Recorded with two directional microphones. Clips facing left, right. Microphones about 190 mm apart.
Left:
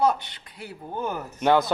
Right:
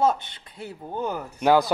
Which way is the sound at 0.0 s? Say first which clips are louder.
Even; 25° right (ahead or behind).